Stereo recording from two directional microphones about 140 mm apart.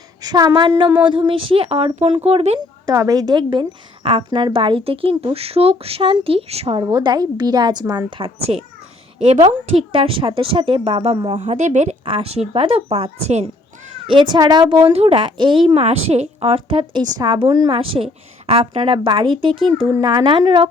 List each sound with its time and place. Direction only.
0.2 s a woman's voice: 30° right (ahead or behind); by 2.6 s 45° right (ahead or behind)
2.6 s a woman's voice: 25° right (ahead or behind); by 6.7 s 45° right (ahead or behind)
6.7 s a woman's voice: 30° right (ahead or behind)
8.5 s a woman's voice: 50° right (ahead or behind)
11.3 s a woman's voice: 55° right (ahead or behind)
12.0 s a woman's voice: 40° right (ahead or behind)
14.1 s a woman's voice: 35° right (ahead or behind)
17.7 s a woman's voice: 40° right (ahead or behind)